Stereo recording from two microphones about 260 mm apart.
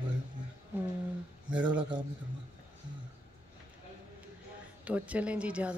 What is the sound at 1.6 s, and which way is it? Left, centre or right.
Speech, centre.